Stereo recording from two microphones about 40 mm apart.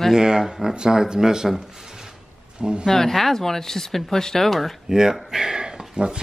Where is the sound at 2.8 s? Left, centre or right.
Centre.